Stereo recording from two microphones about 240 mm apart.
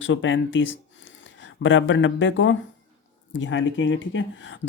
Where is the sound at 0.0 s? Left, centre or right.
Left.